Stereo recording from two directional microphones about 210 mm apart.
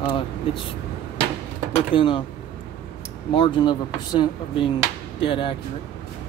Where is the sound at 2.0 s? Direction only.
20° left (ahead or behind).